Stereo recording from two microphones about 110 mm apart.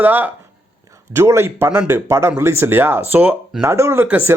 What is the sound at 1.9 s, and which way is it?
Speech, 25° right (ahead or behind).